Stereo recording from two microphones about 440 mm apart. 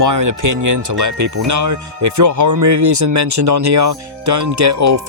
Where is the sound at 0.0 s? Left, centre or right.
Right.